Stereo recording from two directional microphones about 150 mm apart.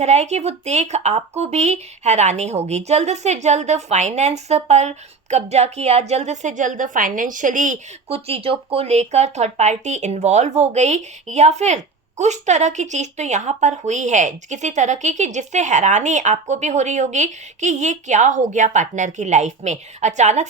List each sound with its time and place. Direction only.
0.0 s a woman's voice: 45° right (ahead or behind)